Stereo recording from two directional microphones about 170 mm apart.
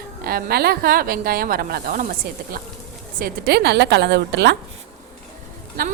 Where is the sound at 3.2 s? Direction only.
70° right (ahead or behind); by 4.5 s 90° right.